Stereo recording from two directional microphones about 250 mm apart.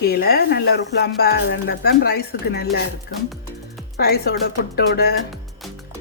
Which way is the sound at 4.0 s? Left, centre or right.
Left.